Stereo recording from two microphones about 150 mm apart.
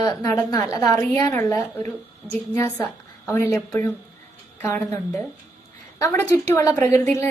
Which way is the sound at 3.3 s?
15° left (ahead or behind).